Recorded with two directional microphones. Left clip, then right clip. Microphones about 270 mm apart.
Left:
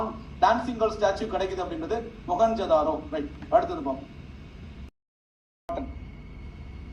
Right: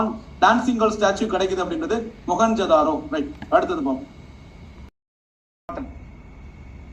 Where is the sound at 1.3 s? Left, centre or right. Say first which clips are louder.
Right 7 dB; right.